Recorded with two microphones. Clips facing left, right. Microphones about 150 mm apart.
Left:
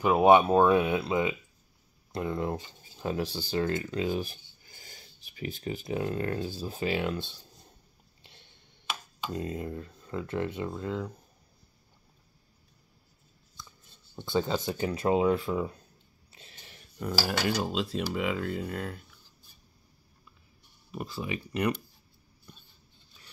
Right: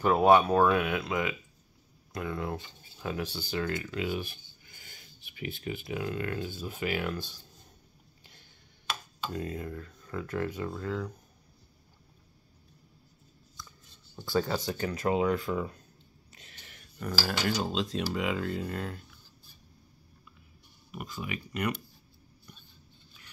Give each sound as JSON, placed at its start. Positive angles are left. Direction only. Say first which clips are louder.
{"t": 0.0, "sound": "speech", "louder": "left 2 dB", "side_deg": 15}
{"t": 8.2, "sound": "a sound", "louder": "left 3 dB", "side_deg": 25}
{"t": 9.2, "sound": "speech", "louder": "left 2 dB", "side_deg": 20}
{"t": 14.1, "sound": "speech", "louder": "left 1 dB", "side_deg": 20}
{"t": 16.3, "sound": "a sound", "louder": "left 2 dB", "side_deg": 30}
{"t": 17.6, "sound": "speech", "louder": "even", "side_deg": 10}
{"t": 20.9, "sound": "speech", "louder": "left 3 dB", "side_deg": 30}